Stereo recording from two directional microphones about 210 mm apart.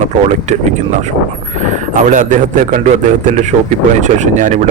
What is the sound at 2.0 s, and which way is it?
Speech, 35° right (ahead or behind).